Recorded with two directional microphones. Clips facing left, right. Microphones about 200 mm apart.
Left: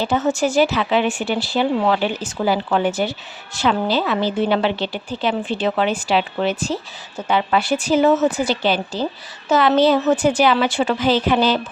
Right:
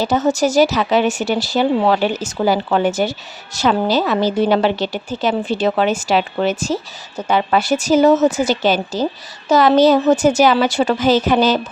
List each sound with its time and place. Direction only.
0.0 s a woman's voice: 40° right (ahead or behind)